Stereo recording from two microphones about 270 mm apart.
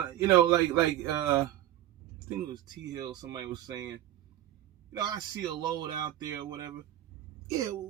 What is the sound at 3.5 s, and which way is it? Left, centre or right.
Speech, centre.